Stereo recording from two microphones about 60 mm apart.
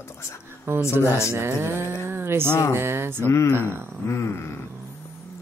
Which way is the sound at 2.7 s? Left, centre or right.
Right.